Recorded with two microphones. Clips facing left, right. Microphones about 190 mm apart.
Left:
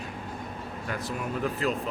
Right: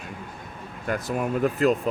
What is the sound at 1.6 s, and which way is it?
Speech, 45° right (ahead or behind).